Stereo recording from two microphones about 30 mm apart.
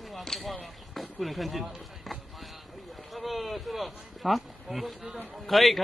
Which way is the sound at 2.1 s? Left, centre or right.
Centre.